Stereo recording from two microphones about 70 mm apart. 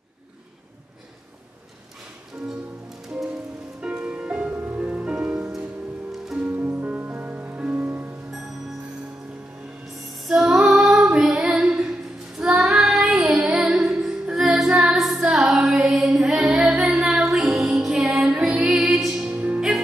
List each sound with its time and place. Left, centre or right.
3.8 s music: right
6.5 s music: right
10.1 s female singing: centre
11.1 s music: centre
12.4 s child singing: centre
14.7 s music: centre
15.1 s female singing: centre
17.0 s music: centre
19.2 s music: centre